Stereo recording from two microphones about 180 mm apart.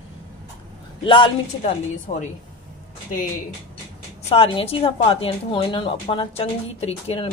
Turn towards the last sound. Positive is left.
turn(degrees=35)  # may be behind; listen again after turning